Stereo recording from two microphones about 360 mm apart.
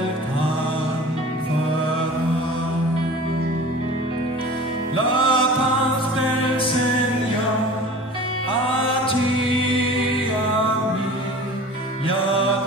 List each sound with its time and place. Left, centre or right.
4.9 s music: centre